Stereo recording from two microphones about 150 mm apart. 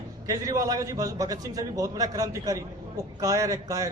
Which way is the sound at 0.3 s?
25° right (ahead or behind).